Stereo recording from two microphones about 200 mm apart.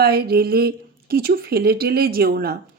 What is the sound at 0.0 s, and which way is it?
Speech, 50° right (ahead or behind).